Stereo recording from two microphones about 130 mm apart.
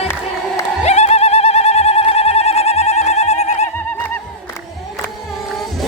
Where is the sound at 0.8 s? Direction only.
55° left (ahead or behind).